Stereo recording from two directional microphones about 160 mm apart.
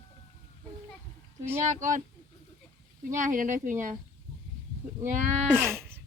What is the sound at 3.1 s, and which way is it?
Speech, 55° right (ahead or behind).